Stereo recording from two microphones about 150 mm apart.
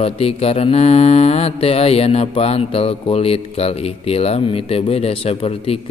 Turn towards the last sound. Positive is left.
turn(degrees=40)  # may be behind; listen again after turning